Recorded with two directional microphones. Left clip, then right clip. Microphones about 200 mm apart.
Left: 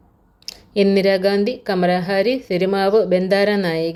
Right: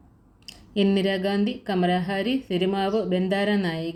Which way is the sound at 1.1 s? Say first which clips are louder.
Left 9 dB; 25° left (ahead or behind).